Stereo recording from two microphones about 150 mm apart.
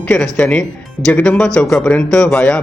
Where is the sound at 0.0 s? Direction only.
10° left (ahead or behind).